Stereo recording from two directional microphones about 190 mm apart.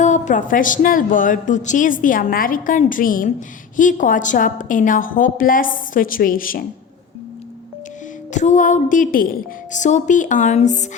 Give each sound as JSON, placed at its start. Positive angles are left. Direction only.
{"t": 0.0, "sound": "a woman's voice", "side_deg": 40}
{"t": 8.3, "sound": "a woman's voice", "side_deg": 40}